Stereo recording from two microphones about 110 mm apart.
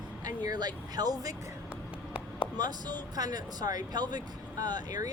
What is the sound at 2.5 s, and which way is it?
Speech, 35° right (ahead or behind).